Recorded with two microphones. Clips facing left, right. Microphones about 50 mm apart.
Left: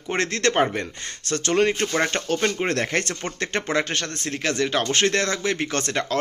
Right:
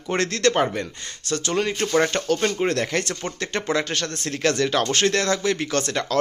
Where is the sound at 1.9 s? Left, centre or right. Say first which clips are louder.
Right 3 dB; centre.